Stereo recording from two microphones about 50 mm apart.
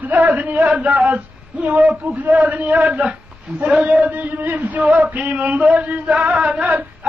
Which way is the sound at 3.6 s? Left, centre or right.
Right.